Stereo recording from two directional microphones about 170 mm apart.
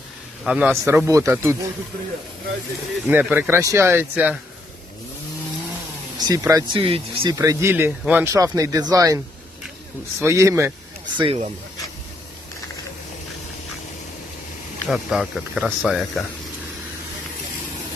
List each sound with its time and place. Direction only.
0.4 s speech: 5° right (ahead or behind)
0.9 s speech: 15° right (ahead or behind)
3.1 s speech: 10° right (ahead or behind)
6.1 s speech: 20° right (ahead or behind)
11.2 s speech: 30° right (ahead or behind)
14.8 s speech: centre (ahead or behind)